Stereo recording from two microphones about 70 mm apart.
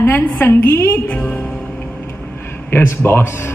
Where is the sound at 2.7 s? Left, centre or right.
Left.